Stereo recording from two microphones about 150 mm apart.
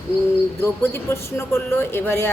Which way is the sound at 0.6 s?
15° left (ahead or behind).